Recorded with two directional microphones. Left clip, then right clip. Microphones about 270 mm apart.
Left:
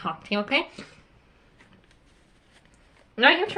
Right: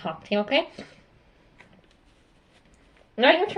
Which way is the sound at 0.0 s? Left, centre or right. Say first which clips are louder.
Right 1 dB; left.